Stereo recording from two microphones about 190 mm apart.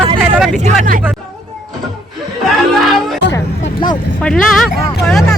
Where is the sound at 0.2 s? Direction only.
5° right (ahead or behind).